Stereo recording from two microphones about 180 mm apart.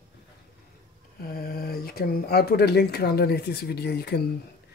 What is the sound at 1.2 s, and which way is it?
Speech, 55° left (ahead or behind).